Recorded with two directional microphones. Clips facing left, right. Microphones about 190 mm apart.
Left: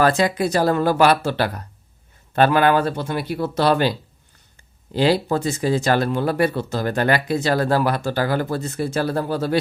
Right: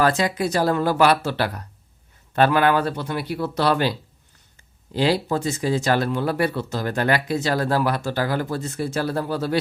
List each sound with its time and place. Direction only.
0.0 s speech: 55° left (ahead or behind); by 3.9 s 35° left (ahead or behind)
4.9 s speech: 50° left (ahead or behind)
5.8 s speech: 40° left (ahead or behind)